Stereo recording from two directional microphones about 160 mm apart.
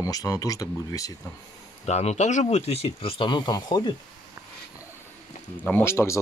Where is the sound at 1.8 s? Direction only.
45° left (ahead or behind); by 3.9 s 25° left (ahead or behind).